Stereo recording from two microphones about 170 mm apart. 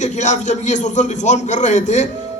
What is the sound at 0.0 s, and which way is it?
A man's voice, 45° left (ahead or behind).